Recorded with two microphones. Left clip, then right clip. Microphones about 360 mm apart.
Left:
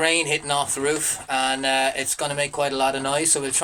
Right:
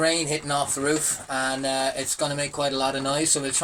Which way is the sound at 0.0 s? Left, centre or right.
Left.